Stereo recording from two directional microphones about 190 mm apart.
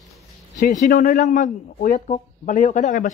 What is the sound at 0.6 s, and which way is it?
Speech, 40° left (ahead or behind).